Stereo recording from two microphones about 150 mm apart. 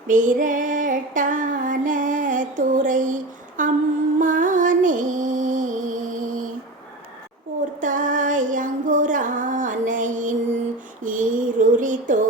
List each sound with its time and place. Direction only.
0.1 s female singing: 55° right (ahead or behind)
3.6 s humming: 60° right (ahead or behind)
4.2 s music: 60° right (ahead or behind)
7.8 s music: 60° right (ahead or behind)
11.0 s a sound: 60° right (ahead or behind)